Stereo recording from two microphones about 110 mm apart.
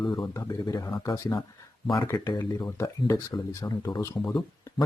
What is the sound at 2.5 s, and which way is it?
Speech, 25° left (ahead or behind).